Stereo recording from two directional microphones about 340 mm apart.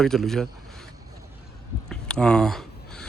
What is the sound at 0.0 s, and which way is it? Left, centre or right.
Speech, centre.